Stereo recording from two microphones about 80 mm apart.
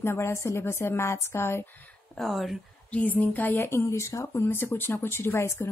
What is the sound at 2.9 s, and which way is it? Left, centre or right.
A woman's voice, centre.